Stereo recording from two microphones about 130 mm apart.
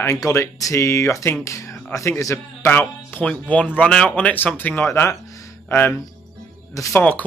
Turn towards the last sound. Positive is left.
turn(degrees=25)  # may be behind; listen again after turning